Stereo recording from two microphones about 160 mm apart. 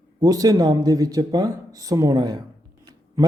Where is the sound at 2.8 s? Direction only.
25° right (ahead or behind).